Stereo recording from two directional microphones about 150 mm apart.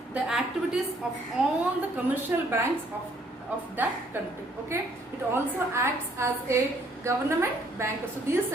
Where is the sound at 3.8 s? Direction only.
10° right (ahead or behind).